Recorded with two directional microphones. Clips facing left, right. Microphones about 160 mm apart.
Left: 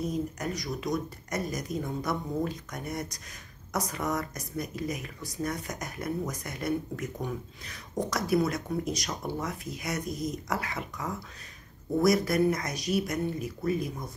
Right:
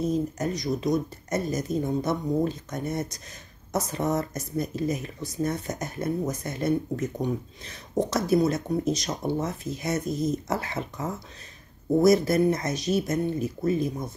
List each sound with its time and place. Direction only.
0.0 s speech: 25° right (ahead or behind)